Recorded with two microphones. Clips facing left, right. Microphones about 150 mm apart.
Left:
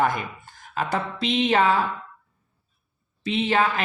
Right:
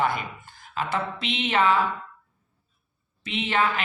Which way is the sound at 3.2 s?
35° left (ahead or behind).